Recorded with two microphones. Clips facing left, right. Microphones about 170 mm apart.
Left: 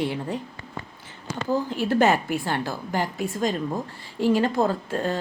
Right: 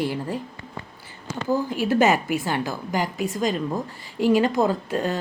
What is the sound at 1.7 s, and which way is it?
A woman's voice, 10° right (ahead or behind).